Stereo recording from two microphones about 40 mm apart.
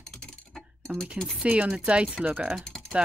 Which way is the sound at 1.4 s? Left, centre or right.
Right.